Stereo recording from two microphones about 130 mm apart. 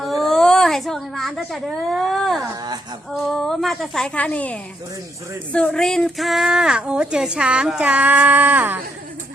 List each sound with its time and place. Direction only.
0.0 s a sound: centre (ahead or behind)
1.5 s a woman's voice: centre (ahead or behind)
2.4 s speech: 25° right (ahead or behind)
3.2 s a woman's voice: centre (ahead or behind); by 8.8 s 15° right (ahead or behind)